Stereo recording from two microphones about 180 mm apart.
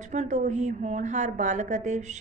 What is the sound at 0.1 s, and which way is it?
A woman's voice, 40° right (ahead or behind).